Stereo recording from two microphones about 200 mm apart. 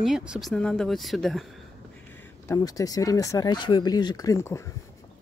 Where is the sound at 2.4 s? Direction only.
15° left (ahead or behind).